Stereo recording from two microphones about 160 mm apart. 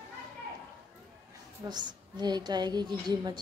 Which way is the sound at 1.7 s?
25° right (ahead or behind).